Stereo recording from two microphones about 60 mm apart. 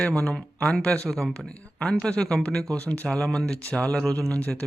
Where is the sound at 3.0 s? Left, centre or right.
Centre.